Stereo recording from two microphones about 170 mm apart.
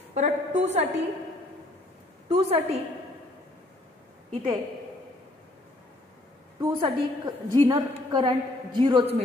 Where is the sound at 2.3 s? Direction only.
35° right (ahead or behind).